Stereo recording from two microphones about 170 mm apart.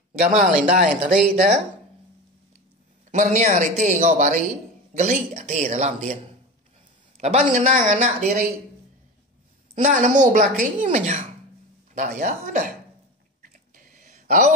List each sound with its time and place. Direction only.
0.2 s a woman's voice: 40° right (ahead or behind)
3.1 s a woman's voice: 45° right (ahead or behind)
7.2 s a woman's voice: 45° right (ahead or behind)
9.8 s a woman's voice: 50° right (ahead or behind)
13.9 s a sound: 50° right (ahead or behind)